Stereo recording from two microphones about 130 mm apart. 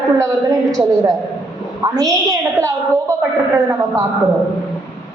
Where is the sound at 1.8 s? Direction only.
30° right (ahead or behind).